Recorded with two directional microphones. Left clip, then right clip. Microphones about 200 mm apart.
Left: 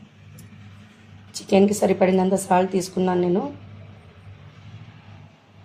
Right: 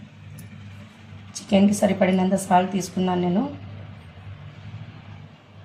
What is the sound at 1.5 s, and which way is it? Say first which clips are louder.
A woman's voice: left 3 dB; 45° left (ahead or behind).